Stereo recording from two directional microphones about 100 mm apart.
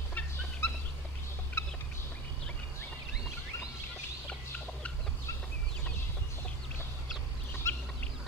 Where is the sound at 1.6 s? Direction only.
25° left (ahead or behind).